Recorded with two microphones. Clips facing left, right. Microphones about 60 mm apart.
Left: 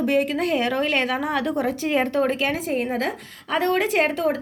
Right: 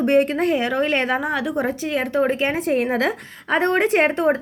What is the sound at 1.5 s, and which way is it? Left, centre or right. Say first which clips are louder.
Speech: even; right.